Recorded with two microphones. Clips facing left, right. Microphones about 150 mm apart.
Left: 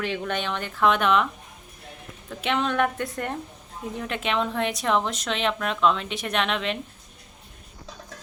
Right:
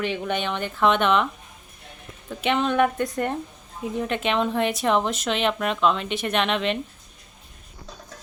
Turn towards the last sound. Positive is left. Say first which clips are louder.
# right 3 dB
turn(degrees=0)  # may be behind; listen again after turning